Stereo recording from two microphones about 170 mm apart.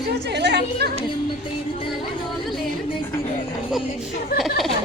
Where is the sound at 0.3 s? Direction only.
80° right.